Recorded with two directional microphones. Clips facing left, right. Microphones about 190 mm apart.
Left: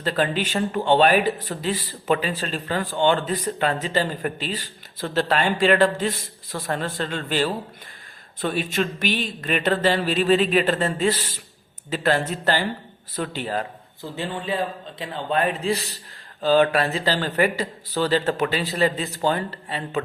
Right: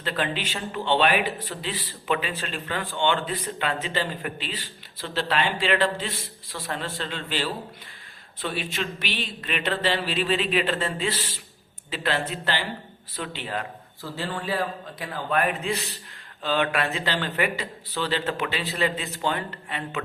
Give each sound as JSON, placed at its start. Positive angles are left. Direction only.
{"t": 0.0, "sound": "speech", "side_deg": 40}
{"t": 14.0, "sound": "a man's voice", "side_deg": 20}